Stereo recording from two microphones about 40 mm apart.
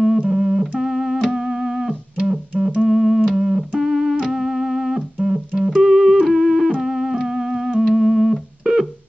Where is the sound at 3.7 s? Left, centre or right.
Centre.